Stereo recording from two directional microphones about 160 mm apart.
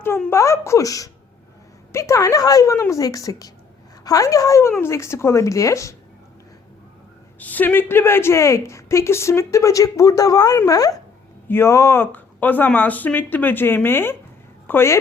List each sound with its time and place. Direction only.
0.0 s speech: 15° left (ahead or behind)
7.3 s a woman's voice: 10° left (ahead or behind)